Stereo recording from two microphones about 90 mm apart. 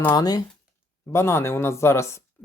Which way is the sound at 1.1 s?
30° left (ahead or behind).